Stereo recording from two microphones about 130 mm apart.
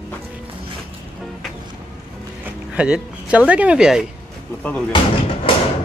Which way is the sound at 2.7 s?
10° right (ahead or behind).